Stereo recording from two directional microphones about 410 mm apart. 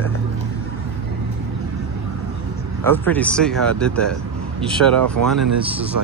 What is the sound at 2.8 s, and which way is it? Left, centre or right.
Speech, centre.